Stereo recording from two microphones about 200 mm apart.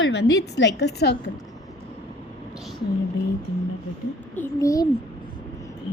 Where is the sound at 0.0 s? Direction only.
60° left (ahead or behind).